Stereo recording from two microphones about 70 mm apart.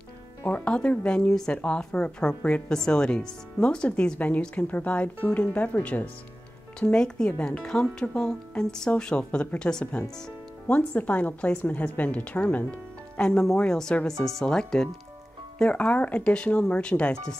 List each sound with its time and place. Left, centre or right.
0.4 s speech: centre
6.8 s a woman's voice: centre